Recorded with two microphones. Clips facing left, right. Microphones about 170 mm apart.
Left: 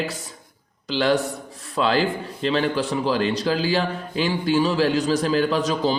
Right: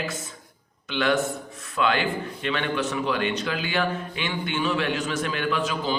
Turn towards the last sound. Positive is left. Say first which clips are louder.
# left 5 dB
turn(degrees=40)  # may be behind; listen again after turning